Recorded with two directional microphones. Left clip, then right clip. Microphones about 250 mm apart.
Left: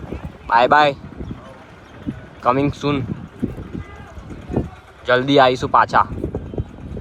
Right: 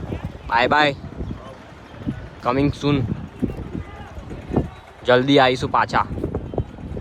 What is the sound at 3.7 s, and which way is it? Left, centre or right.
Run, right.